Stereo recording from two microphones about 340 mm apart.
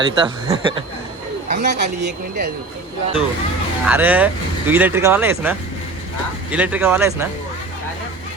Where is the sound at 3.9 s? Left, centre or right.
Centre.